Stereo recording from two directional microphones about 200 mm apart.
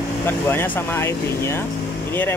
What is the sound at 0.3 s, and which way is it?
Speech, 10° left (ahead or behind).